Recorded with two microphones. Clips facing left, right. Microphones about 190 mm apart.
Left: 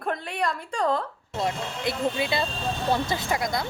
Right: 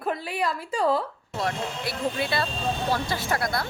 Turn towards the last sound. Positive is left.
turn(degrees=15)  # may be behind; listen again after turning